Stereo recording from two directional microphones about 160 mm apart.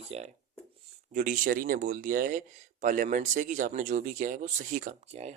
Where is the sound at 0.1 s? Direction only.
40° right (ahead or behind).